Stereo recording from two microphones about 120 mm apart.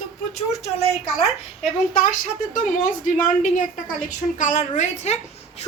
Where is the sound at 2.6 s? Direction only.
90° left; by 5.2 s 70° left (ahead or behind).